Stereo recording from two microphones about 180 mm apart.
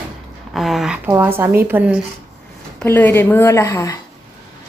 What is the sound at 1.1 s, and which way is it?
Speech, 15° right (ahead or behind).